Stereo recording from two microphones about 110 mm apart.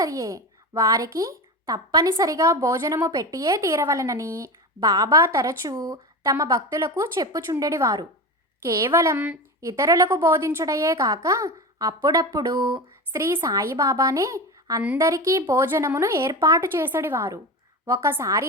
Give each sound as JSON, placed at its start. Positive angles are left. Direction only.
{"t": 0.0, "sound": "a child's voice", "side_deg": -30}
{"t": 16.6, "sound": "a woman's voice", "side_deg": -20}